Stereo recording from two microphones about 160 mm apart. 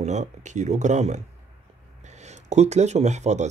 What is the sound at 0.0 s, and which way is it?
Speech, 50° right (ahead or behind).